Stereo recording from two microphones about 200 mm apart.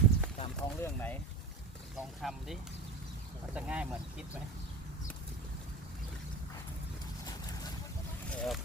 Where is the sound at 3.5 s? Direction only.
5° right (ahead or behind).